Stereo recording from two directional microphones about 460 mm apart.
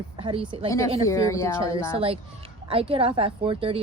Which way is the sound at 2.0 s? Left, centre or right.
Centre.